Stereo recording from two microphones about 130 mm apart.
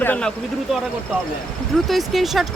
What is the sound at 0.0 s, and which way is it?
Speech, 10° left (ahead or behind).